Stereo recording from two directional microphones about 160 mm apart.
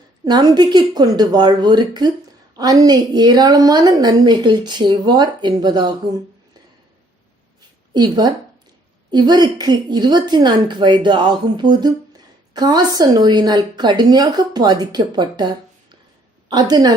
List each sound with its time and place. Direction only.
0.3 s a woman's voice: 25° right (ahead or behind)
7.9 s a woman's voice: 25° right (ahead or behind)